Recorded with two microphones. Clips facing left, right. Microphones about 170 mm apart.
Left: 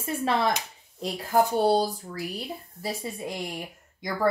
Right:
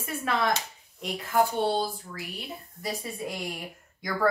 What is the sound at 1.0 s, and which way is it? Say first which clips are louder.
Speech: left 2 dB; 40° left (ahead or behind).